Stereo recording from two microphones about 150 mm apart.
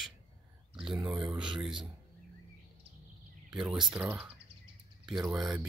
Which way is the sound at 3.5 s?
5° right (ahead or behind).